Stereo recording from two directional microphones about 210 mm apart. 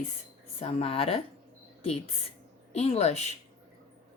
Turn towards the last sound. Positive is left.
turn(degrees=30)  # may be behind; listen again after turning